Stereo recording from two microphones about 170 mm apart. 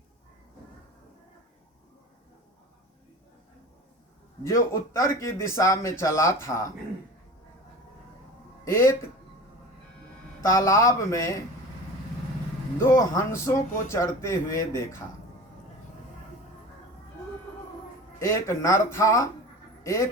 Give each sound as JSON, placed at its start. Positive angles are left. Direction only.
{"t": 4.4, "sound": "speech", "side_deg": 15}
{"t": 8.6, "sound": "speech", "side_deg": 15}
{"t": 10.4, "sound": "speech", "side_deg": 15}
{"t": 12.8, "sound": "speech", "side_deg": 15}
{"t": 18.2, "sound": "speech", "side_deg": 15}